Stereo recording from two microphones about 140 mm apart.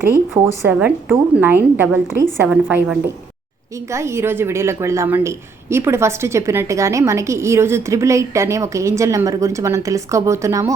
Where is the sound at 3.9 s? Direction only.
20° right (ahead or behind).